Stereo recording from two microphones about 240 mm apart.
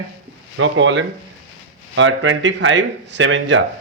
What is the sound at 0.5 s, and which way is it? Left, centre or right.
Speech, right.